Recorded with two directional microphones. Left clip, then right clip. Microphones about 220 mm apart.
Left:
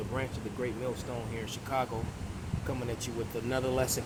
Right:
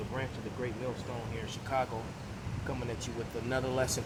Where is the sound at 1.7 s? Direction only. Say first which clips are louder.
Even; 20° left (ahead or behind).